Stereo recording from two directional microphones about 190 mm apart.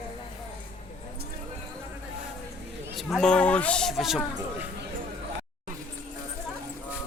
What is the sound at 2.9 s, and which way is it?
Speech, centre (ahead or behind).